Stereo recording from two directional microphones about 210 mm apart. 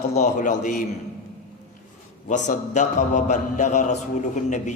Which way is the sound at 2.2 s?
35° left (ahead or behind).